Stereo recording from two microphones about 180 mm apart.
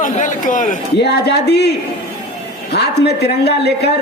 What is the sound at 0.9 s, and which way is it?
Speech, 70° left (ahead or behind).